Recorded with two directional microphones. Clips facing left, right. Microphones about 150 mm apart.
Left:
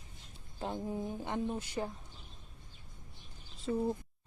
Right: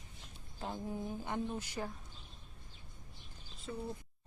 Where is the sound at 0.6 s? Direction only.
25° left (ahead or behind).